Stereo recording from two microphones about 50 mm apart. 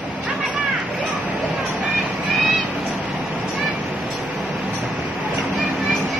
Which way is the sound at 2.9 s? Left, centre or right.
Right.